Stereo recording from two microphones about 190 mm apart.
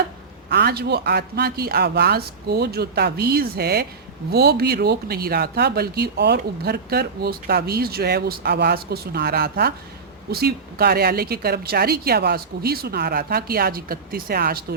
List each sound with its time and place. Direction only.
0.5 s a woman's voice: 55° right (ahead or behind)